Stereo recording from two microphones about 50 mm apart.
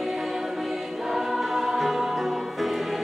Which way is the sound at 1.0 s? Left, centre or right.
Centre.